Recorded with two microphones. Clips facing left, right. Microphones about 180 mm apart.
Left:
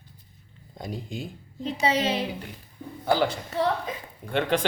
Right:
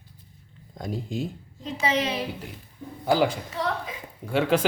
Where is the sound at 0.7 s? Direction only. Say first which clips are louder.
Right 4 dB; centre (ahead or behind).